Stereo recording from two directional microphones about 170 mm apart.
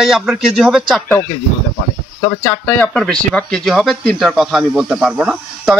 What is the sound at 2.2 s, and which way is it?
Speech, 15° left (ahead or behind).